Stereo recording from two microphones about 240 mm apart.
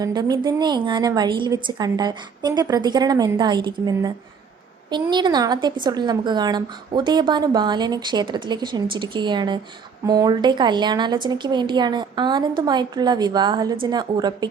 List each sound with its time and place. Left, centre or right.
0.0 s a woman's voice: centre